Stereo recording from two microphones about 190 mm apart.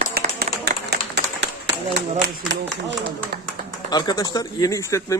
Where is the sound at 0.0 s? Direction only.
55° right (ahead or behind).